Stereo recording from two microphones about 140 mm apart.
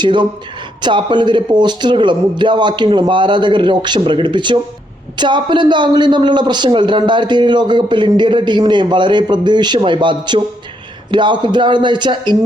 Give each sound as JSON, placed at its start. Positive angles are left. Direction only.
{"t": 0.0, "sound": "a man's voice", "side_deg": -35}